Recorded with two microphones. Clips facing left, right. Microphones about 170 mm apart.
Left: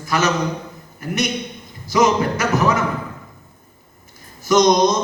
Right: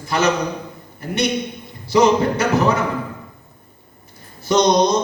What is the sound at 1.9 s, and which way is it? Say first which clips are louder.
Speech: right 2 dB; 30° right (ahead or behind).